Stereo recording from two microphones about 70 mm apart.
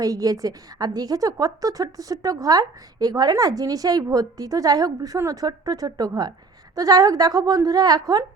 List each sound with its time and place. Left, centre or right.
0.0 s a woman's voice: right